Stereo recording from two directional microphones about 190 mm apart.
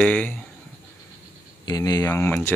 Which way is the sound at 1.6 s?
20° left (ahead or behind).